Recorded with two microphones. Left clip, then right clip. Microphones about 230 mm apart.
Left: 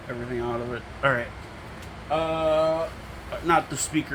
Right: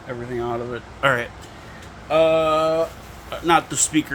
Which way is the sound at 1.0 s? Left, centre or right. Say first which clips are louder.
Right 4 dB; right.